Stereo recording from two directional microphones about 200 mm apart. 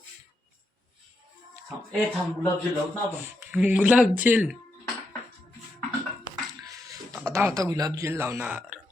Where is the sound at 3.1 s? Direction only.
5° right (ahead or behind).